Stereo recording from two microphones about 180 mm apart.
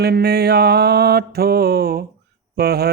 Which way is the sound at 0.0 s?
60° right (ahead or behind).